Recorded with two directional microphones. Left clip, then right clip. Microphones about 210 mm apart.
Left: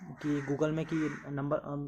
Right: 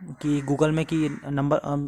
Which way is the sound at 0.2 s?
35° right (ahead or behind).